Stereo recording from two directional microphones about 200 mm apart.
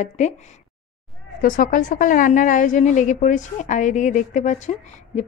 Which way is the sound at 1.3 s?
40° left (ahead or behind).